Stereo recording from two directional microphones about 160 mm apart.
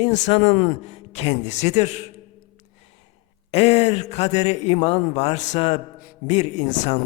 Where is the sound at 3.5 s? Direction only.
40° left (ahead or behind).